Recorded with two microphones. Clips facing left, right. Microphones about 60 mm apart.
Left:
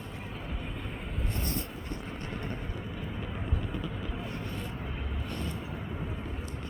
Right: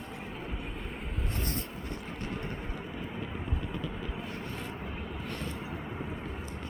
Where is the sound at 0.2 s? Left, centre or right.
Centre.